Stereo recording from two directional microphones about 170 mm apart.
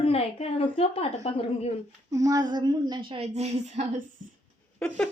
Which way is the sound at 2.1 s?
20° right (ahead or behind).